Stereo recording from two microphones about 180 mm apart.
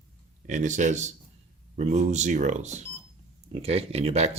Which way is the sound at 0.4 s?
40° right (ahead or behind).